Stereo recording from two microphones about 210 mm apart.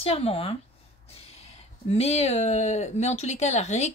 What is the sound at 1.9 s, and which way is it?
Speech, 30° left (ahead or behind).